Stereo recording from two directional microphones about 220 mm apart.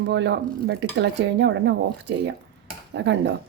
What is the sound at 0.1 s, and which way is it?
Speech, 50° right (ahead or behind).